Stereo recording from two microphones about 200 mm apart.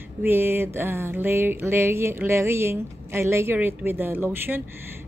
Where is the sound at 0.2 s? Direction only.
10° right (ahead or behind).